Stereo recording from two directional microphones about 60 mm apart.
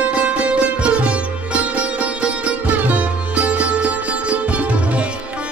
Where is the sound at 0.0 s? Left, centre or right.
Right.